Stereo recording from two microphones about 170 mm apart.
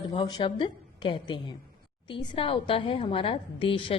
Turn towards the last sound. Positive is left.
turn(degrees=30)  # may be behind; listen again after turning